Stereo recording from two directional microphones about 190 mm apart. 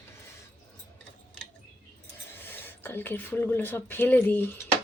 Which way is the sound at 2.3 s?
10° left (ahead or behind).